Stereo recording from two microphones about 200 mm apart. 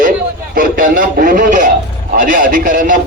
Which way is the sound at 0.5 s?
45° right (ahead or behind).